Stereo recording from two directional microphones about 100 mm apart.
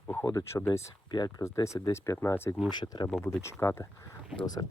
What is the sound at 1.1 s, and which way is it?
Speech, 45° left (ahead or behind).